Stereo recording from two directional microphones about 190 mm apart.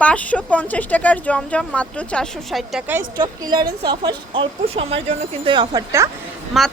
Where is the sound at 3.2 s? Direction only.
20° right (ahead or behind).